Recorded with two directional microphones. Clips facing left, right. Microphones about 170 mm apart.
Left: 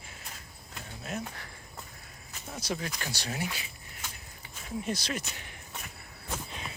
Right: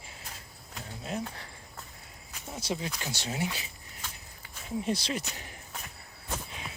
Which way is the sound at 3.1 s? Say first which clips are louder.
Right 2 dB; 25° right (ahead or behind).